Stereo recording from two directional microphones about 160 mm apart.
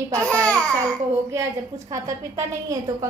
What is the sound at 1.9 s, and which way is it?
A woman's voice, 20° right (ahead or behind).